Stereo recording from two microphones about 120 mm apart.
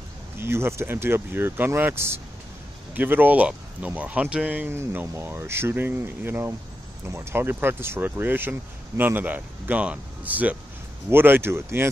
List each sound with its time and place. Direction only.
0.4 s speech: 20° right (ahead or behind)